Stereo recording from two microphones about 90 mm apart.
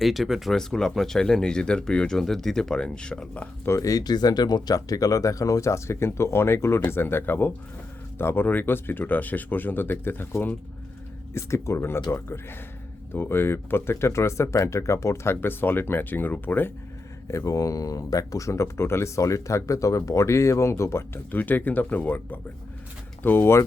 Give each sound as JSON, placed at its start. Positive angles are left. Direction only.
{"t": 0.0, "sound": "speech", "side_deg": 0}
{"t": 3.7, "sound": "speech", "side_deg": 40}
{"t": 17.2, "sound": "speech", "side_deg": 35}
{"t": 21.2, "sound": "speech", "side_deg": 20}